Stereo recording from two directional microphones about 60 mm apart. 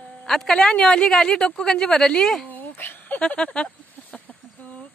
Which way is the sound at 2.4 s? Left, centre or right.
Left.